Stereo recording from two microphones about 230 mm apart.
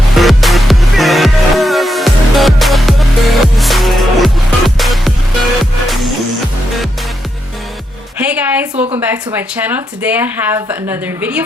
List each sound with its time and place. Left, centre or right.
0.1 s music: centre
8.2 s music: centre
9.0 s speech: centre